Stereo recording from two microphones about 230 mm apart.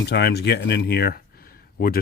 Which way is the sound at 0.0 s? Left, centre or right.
Left.